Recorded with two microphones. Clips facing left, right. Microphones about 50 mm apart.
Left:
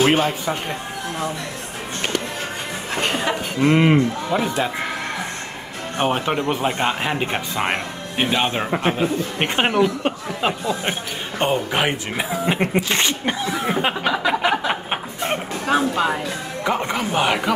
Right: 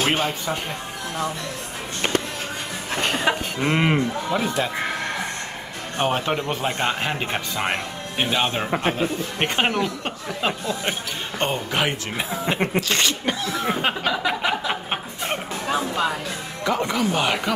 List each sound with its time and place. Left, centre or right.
0.0 s speech: centre
3.6 s speech: centre
5.9 s speech: centre
14.4 s a sound: centre
15.7 s speech: left
16.6 s speech: left
17.1 s speech: centre